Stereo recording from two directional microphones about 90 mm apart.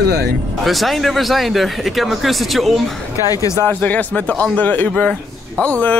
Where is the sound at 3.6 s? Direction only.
15° left (ahead or behind).